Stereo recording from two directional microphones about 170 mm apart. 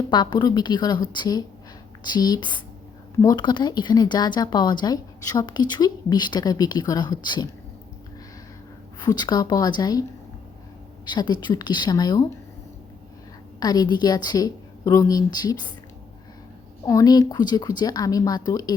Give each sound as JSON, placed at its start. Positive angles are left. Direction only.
{"t": 0.1, "sound": "speech", "side_deg": 25}
{"t": 9.0, "sound": "speech", "side_deg": 25}
{"t": 11.0, "sound": "speech", "side_deg": 25}
{"t": 13.6, "sound": "speech", "side_deg": 25}
{"t": 16.8, "sound": "speech", "side_deg": 20}